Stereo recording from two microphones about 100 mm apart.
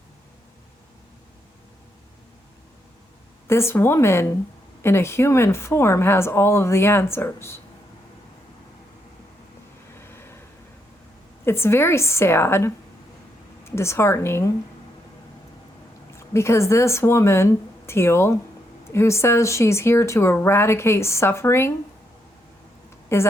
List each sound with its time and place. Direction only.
3.4 s speech: 25° left (ahead or behind)
10.0 s vehicle: 25° left (ahead or behind)
11.4 s speech: 25° left (ahead or behind)
16.1 s speech: 25° left (ahead or behind)
23.1 s speech: 25° left (ahead or behind)